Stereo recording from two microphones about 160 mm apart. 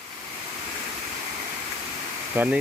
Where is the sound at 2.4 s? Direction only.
15° right (ahead or behind).